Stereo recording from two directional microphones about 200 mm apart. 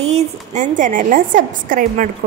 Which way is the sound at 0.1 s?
40° right (ahead or behind).